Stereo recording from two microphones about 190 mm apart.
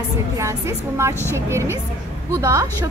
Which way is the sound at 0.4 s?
15° right (ahead or behind).